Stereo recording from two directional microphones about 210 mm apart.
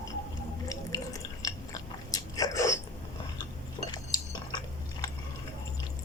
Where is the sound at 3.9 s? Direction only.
20° left (ahead or behind).